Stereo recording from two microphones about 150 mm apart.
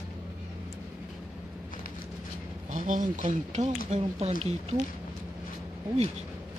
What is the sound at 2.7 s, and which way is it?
Speech, 55° right (ahead or behind).